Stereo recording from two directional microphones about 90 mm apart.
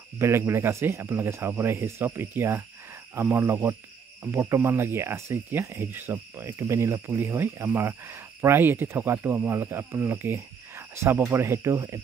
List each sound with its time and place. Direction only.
0.2 s speech: 30° right (ahead or behind)
5.9 s speech: 20° right (ahead or behind)